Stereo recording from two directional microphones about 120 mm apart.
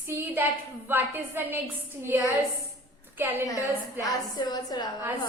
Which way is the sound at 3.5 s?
30° left (ahead or behind).